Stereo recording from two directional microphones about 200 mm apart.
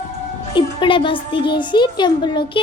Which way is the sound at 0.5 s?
25° left (ahead or behind).